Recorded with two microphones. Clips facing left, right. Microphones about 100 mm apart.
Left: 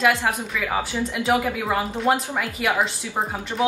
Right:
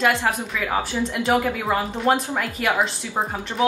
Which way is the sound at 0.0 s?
Centre (ahead or behind).